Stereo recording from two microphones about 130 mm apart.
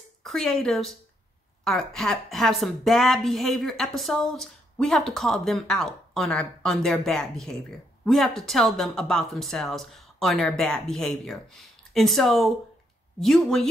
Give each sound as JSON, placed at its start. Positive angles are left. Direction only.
{"t": 0.2, "sound": "speech", "side_deg": 0}